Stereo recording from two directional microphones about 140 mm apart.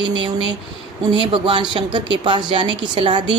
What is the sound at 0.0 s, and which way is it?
Speech, 35° right (ahead or behind).